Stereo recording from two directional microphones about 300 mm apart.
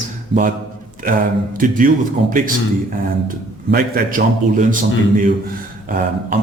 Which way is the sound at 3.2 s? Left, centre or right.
Right.